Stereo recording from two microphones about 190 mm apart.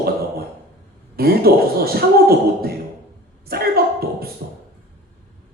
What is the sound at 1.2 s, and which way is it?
Speech, 55° right (ahead or behind).